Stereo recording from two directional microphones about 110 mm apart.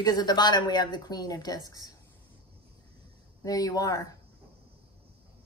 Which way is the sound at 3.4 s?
35° left (ahead or behind).